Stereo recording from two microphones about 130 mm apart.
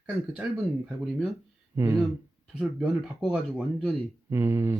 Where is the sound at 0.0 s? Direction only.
10° right (ahead or behind).